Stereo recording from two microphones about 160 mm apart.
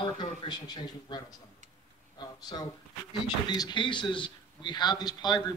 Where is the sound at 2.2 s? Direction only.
25° left (ahead or behind).